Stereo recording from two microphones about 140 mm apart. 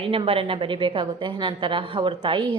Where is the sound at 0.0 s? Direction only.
40° right (ahead or behind).